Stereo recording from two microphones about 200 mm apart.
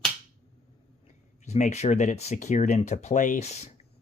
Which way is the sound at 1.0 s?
35° left (ahead or behind).